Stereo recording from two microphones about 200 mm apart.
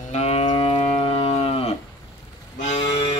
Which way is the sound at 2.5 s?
35° left (ahead or behind).